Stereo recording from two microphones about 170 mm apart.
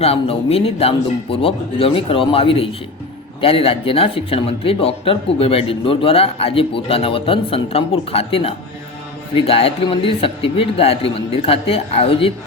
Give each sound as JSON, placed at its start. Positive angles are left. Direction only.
{"t": 0.0, "sound": "speech", "side_deg": 35}